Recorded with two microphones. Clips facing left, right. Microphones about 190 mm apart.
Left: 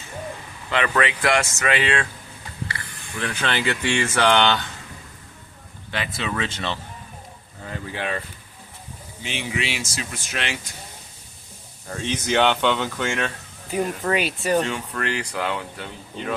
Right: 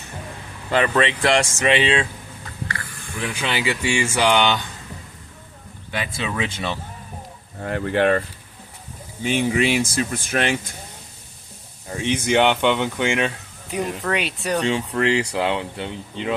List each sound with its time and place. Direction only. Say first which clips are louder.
0.7 s speech: right 3 dB; 30° right (ahead or behind)
3.2 s speech: even; 10° right (ahead or behind)
6.1 s speech: right 1 dB; 15° right (ahead or behind)
7.6 s speech: right 11 dB; 65° right (ahead or behind)
9.2 s speech: right 9 dB; 50° right (ahead or behind)
11.9 s speech: right 4 dB; 15° right (ahead or behind)
13.7 s speech: left 1 dB; centre (ahead or behind)
14.7 s speech: right 7 dB; 25° right (ahead or behind)